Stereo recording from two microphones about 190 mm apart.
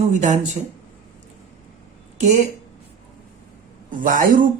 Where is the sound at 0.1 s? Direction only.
40° right (ahead or behind).